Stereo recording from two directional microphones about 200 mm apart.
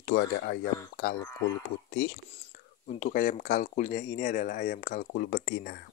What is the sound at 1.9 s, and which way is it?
Speech, 55° left (ahead or behind).